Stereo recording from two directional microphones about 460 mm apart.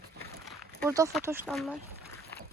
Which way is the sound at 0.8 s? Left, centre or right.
Centre.